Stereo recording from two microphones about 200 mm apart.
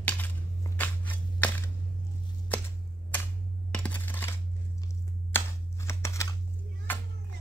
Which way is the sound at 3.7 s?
5° left (ahead or behind).